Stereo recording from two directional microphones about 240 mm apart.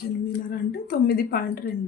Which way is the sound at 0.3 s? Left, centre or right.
Left.